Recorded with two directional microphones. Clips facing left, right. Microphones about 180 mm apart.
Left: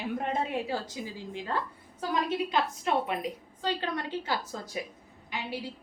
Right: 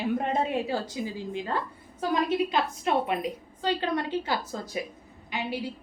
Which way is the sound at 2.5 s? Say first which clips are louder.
Right 2 dB; 20° right (ahead or behind).